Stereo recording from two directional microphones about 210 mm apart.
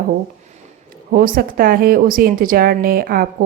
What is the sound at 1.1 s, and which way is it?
A woman's voice, 40° right (ahead or behind).